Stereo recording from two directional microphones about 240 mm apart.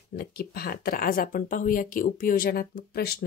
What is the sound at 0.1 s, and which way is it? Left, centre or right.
A woman's voice, left.